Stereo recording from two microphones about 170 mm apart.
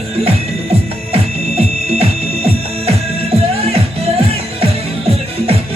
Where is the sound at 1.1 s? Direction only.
35° right (ahead or behind).